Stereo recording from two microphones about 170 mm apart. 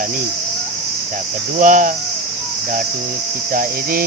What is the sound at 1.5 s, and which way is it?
Speech, 50° right (ahead or behind).